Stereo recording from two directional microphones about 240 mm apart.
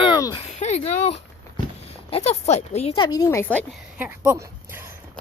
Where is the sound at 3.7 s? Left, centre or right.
Centre.